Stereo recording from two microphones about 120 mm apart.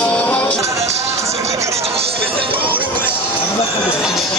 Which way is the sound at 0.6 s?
25° right (ahead or behind).